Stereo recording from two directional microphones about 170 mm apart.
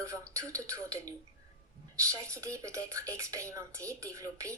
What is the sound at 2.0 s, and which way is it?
A woman's voice, 15° right (ahead or behind).